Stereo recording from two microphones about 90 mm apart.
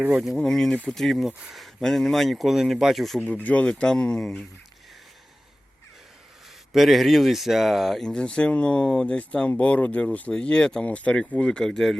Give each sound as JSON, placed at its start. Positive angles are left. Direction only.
{"t": 0.0, "sound": "speech", "side_deg": -10}
{"t": 0.3, "sound": "speech", "side_deg": 5}
{"t": 1.3, "sound": "speech", "side_deg": -15}
{"t": 1.5, "sound": "speech", "side_deg": 0}
{"t": 3.2, "sound": "speech", "side_deg": 15}
{"t": 6.7, "sound": "speech", "side_deg": 0}